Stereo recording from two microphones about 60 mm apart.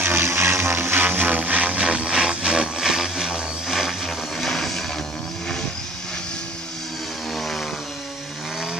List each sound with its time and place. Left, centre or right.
0.0 s music: right; by 4.8 s centre
7.3 s chainsaw: centre